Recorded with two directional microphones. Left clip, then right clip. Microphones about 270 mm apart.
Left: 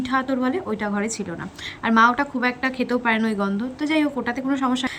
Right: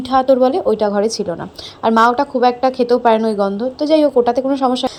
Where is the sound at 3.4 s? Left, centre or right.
Centre.